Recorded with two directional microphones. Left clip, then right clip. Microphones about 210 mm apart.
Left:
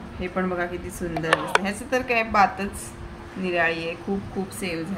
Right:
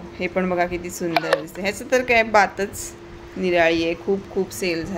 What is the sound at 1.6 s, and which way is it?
A woman's voice, 50° right (ahead or behind).